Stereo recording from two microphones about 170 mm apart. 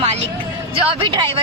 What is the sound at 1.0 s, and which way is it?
Speech, 30° right (ahead or behind).